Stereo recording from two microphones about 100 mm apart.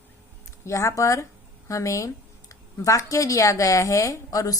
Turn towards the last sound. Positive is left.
turn(degrees=35)  # may be behind; listen again after turning